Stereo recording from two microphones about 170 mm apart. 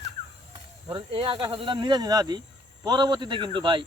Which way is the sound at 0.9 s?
30° right (ahead or behind).